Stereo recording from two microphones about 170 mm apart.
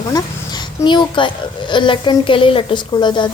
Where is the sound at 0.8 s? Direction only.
30° left (ahead or behind).